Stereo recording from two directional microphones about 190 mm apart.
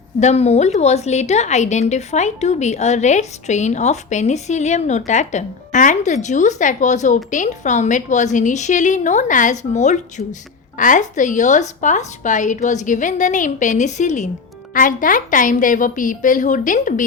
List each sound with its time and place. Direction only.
0.2 s a woman's voice: 35° left (ahead or behind)